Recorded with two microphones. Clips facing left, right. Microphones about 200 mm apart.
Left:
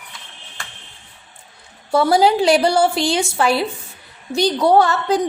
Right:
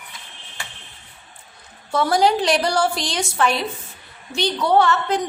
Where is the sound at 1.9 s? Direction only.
30° left (ahead or behind).